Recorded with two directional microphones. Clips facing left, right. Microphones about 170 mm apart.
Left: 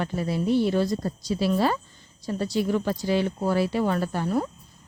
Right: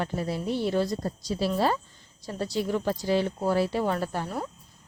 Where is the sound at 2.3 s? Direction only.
30° right (ahead or behind).